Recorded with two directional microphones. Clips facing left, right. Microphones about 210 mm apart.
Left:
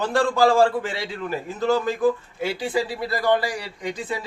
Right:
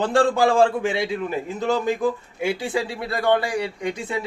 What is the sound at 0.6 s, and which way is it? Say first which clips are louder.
A man's voice: right 3 dB; 20° right (ahead or behind).